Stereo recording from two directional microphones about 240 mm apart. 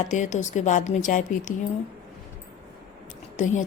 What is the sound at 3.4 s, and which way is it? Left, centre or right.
Speech, left.